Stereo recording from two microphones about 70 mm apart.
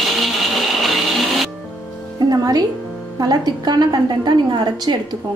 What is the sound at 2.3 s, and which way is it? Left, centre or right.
Music, right.